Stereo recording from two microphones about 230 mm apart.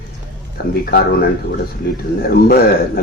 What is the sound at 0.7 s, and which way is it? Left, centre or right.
Speech, left.